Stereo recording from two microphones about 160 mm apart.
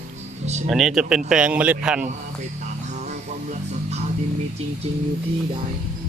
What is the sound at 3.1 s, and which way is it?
Music, 45° right (ahead or behind).